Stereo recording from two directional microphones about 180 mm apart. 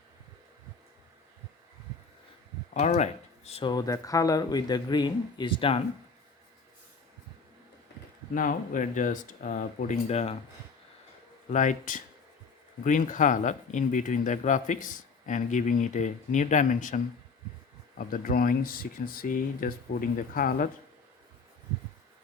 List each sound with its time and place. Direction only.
2.7 s speech: 40° left (ahead or behind)
8.4 s speech: 45° left (ahead or behind)
11.5 s speech: 45° left (ahead or behind)